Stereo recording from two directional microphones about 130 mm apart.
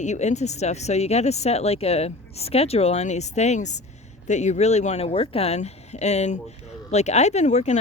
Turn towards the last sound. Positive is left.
turn(degrees=60)  # may be behind; listen again after turning